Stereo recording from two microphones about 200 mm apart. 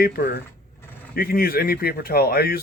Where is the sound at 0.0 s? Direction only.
50° left (ahead or behind).